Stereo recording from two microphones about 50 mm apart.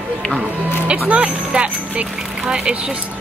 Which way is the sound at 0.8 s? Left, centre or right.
Right.